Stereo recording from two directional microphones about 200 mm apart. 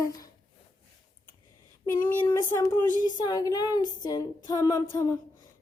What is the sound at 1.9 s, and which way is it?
Speech, 20° left (ahead or behind).